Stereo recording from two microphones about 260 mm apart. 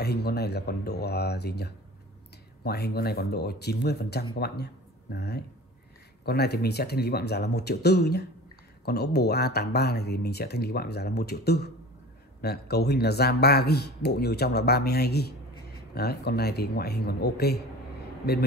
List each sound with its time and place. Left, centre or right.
0.0 s speech: left